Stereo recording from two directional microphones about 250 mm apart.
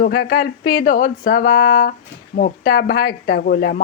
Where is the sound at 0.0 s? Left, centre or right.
Left.